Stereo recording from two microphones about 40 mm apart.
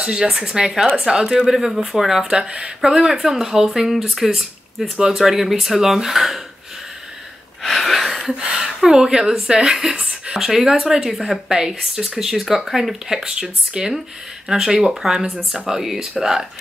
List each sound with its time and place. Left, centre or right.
0.0 s speech: right
0.5 s speech: centre
2.3 s speech: right; by 6.4 s centre
7.6 s a sound: centre
8.4 s speech: right